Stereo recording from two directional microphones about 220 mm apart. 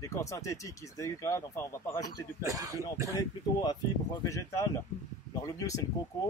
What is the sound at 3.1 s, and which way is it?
Speech, 20° left (ahead or behind).